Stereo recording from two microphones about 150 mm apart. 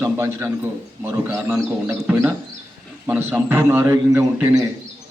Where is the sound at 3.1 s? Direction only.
15° right (ahead or behind).